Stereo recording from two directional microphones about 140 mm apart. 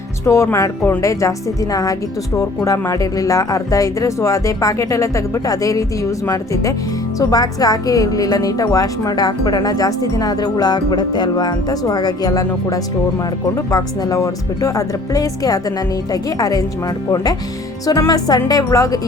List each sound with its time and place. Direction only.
0.3 s a woman's voice: 20° left (ahead or behind)
17.8 s a woman's voice: 25° left (ahead or behind)